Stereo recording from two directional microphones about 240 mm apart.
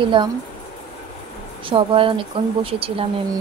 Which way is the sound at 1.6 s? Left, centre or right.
Right.